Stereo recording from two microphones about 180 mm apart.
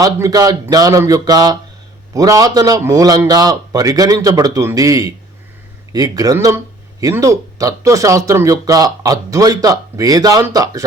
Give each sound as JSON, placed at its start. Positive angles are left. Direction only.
{"t": 0.0, "sound": "speech", "side_deg": -20}